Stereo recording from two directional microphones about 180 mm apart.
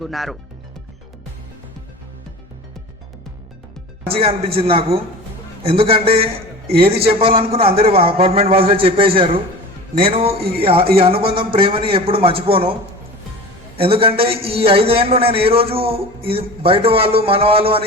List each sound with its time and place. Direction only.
0.0 s speech: centre (ahead or behind)
4.1 s a man's voice: 35° right (ahead or behind)
13.7 s speech: 30° right (ahead or behind)